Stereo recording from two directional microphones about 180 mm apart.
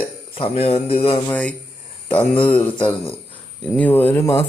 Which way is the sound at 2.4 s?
30° left (ahead or behind).